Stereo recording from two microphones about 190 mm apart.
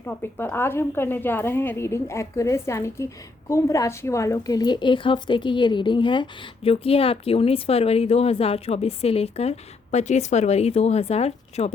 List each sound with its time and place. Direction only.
0.0 s a woman's voice: 10° left (ahead or behind); by 11.7 s 35° left (ahead or behind)